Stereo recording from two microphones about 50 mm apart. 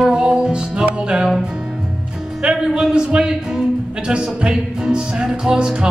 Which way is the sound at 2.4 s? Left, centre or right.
Centre.